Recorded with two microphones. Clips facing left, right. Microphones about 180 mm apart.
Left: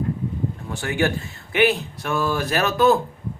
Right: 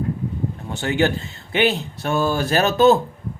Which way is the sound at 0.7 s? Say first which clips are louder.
Right 3 dB; 25° right (ahead or behind).